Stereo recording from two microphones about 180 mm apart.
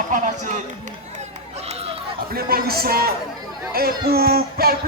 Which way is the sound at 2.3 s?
60° right (ahead or behind).